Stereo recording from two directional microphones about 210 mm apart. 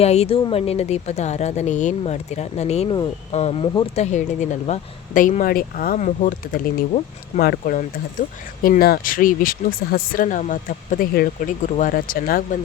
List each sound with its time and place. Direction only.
0.0 s speech: 30° left (ahead or behind)